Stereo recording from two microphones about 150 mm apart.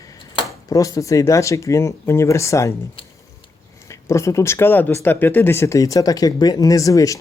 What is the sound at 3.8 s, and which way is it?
Speech, 20° left (ahead or behind).